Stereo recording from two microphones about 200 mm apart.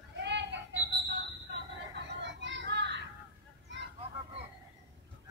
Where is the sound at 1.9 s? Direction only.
65° right (ahead or behind).